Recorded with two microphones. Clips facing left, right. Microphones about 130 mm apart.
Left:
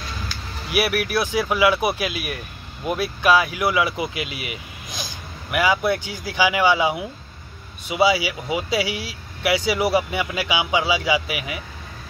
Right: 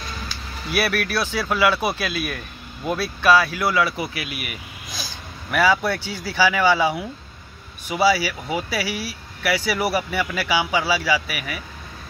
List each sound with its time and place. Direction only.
0.7 s speech: 15° left (ahead or behind)